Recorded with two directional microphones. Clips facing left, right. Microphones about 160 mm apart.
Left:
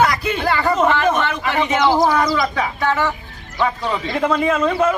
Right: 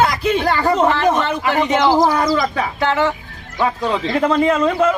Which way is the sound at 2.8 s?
25° right (ahead or behind).